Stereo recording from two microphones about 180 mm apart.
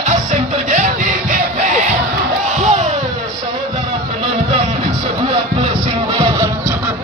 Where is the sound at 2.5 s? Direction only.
40° right (ahead or behind).